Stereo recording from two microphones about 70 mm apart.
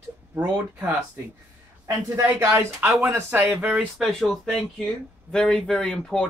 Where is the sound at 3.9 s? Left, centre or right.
Centre.